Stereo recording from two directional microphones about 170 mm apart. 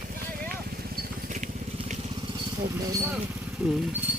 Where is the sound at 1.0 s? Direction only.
45° right (ahead or behind).